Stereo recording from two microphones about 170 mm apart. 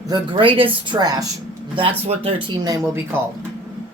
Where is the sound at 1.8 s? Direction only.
35° right (ahead or behind); by 3.2 s 15° right (ahead or behind).